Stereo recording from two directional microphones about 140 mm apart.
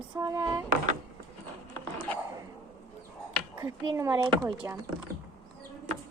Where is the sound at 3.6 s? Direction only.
25° right (ahead or behind).